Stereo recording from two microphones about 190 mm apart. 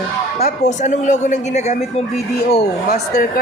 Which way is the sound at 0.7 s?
40° left (ahead or behind).